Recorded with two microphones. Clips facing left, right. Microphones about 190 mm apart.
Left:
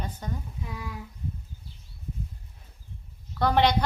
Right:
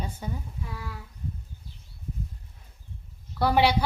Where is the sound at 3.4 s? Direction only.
10° right (ahead or behind).